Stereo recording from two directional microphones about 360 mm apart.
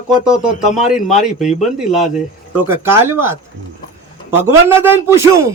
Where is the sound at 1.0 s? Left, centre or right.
Centre.